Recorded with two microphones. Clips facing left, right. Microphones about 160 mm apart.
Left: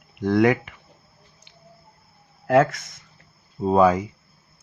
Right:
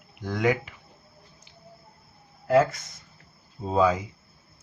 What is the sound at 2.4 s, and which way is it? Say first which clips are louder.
Speech: left 3 dB; 70° left (ahead or behind).